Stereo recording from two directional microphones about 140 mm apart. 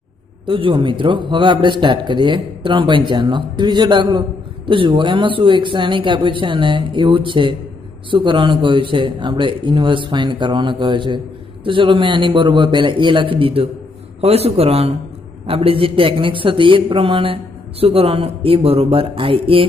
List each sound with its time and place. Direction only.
0.5 s a man's voice: 35° right (ahead or behind)